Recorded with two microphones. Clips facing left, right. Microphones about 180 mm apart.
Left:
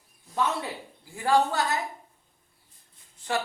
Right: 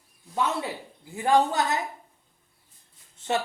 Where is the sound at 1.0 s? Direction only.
20° right (ahead or behind).